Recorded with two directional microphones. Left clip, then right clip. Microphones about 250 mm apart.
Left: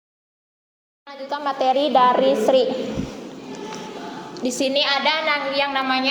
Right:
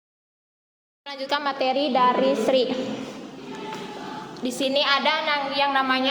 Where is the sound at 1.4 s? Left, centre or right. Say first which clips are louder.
Left 7 dB; centre.